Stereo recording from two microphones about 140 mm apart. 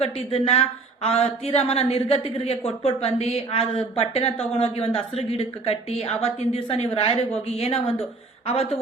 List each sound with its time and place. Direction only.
0.0 s speech: 45° left (ahead or behind)